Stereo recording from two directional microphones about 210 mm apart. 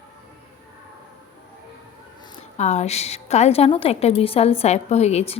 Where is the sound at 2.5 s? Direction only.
30° left (ahead or behind).